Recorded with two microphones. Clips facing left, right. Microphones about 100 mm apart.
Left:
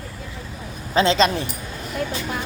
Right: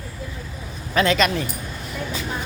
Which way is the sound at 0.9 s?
25° left (ahead or behind).